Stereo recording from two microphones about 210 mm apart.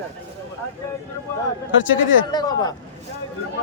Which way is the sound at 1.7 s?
65° left (ahead or behind).